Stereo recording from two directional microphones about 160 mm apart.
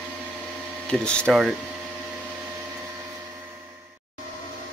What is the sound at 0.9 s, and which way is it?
Speech, 5° left (ahead or behind).